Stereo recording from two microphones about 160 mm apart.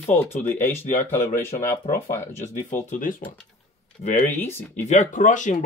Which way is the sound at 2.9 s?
55° left (ahead or behind).